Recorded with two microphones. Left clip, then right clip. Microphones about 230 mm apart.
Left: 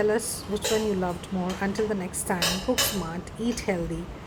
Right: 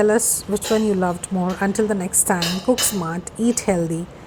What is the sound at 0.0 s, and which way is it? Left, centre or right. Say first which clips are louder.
A woman's voice: right 7 dB; right.